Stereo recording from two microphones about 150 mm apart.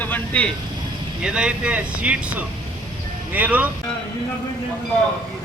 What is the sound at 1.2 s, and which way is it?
Speech, 5° right (ahead or behind).